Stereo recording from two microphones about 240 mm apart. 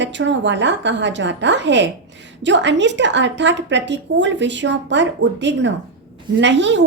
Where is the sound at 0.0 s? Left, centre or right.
Right.